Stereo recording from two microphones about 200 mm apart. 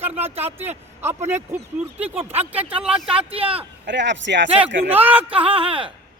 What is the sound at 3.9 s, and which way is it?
Speech, 60° right (ahead or behind).